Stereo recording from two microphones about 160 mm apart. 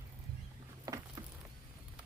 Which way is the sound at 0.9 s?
20° right (ahead or behind).